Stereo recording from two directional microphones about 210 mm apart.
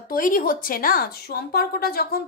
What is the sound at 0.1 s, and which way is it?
Speech, 40° left (ahead or behind).